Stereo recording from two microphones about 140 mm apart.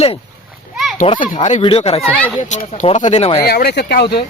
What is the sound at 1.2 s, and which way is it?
Speech, 65° left (ahead or behind).